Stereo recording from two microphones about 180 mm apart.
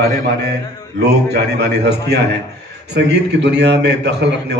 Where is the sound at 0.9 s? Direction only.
65° right (ahead or behind).